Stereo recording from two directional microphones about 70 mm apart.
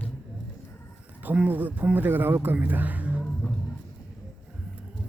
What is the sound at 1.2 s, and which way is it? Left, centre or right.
Speech, right.